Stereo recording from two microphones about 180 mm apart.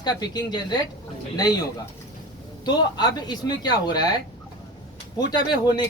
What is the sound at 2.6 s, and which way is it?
Speech, 25° left (ahead or behind).